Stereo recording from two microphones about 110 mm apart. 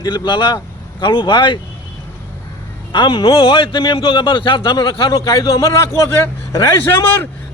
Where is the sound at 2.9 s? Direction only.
45° left (ahead or behind).